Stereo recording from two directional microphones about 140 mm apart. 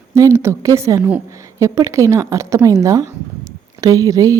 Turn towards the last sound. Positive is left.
turn(degrees=-25)  # may be behind; listen again after turning